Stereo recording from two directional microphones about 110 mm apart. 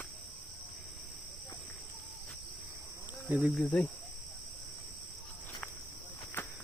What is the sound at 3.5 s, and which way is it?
Speech, 10° left (ahead or behind).